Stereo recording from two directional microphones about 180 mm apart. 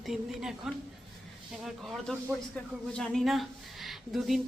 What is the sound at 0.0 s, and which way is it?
A woman's voice, centre (ahead or behind).